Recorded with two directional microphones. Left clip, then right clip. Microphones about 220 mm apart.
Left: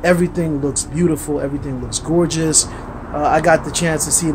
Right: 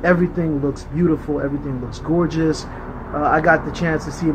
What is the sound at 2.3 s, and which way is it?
Speech, 10° left (ahead or behind).